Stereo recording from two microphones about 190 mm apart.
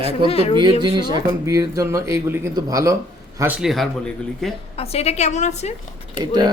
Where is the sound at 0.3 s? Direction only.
30° left (ahead or behind).